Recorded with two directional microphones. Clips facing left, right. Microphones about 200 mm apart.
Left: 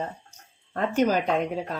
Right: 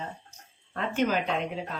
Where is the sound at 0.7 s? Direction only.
40° left (ahead or behind).